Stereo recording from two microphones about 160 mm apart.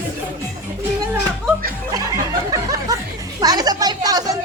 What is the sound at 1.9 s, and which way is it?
Music, 25° right (ahead or behind).